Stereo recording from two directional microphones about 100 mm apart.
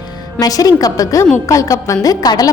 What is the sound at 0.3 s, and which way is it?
A woman's voice, 40° left (ahead or behind).